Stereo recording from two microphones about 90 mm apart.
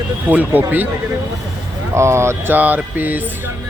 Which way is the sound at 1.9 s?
30° right (ahead or behind).